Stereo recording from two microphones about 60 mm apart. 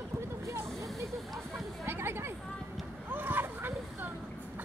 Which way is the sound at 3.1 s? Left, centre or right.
Right.